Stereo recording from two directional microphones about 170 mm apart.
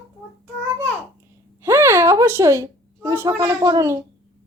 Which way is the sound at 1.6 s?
15° right (ahead or behind).